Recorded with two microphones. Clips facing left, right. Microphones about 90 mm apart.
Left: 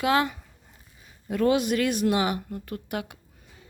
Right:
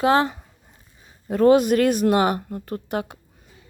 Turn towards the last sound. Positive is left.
turn(degrees=-35)  # may be behind; listen again after turning